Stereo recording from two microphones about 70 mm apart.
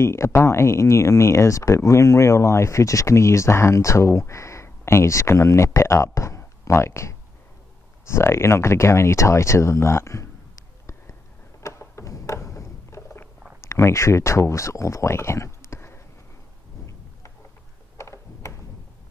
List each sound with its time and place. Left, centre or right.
0.0 s speech: left
11.8 s a sound: left
13.6 s speech: left
17.9 s mechanisms: left